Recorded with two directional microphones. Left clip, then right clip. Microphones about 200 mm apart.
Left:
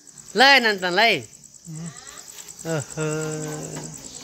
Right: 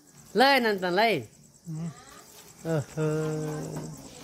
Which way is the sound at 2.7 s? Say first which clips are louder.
Left 2 dB; 5° left (ahead or behind).